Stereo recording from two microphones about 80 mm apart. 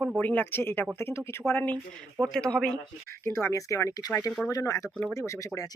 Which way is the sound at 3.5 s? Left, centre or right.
Left.